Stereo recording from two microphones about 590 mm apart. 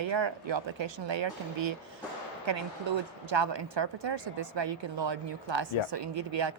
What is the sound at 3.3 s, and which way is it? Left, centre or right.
Speech, right.